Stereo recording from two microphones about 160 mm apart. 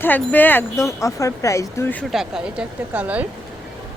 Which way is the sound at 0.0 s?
10° left (ahead or behind).